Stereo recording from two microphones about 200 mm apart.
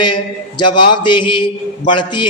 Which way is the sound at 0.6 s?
20° left (ahead or behind).